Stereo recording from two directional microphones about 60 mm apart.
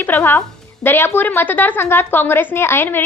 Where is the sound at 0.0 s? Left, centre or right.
Left.